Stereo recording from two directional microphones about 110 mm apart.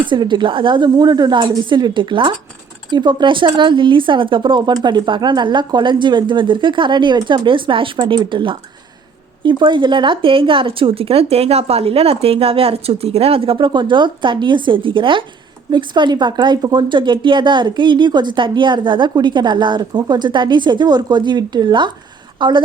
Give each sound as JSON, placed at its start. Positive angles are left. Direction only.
{"t": 0.0, "sound": "a woman's voice", "side_deg": -45}